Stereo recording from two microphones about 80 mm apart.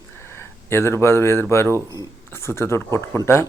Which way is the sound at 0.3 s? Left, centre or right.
Left.